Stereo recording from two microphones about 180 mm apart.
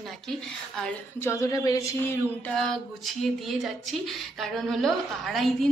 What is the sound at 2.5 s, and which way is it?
Speech, centre (ahead or behind).